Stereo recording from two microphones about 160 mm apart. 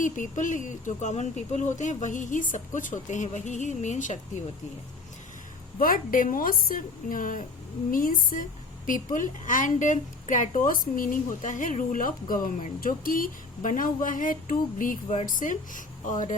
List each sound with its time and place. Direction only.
0.0 s speech: 55° left (ahead or behind)
5.8 s speech: 60° left (ahead or behind)